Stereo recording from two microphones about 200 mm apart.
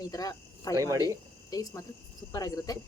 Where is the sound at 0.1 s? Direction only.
20° left (ahead or behind).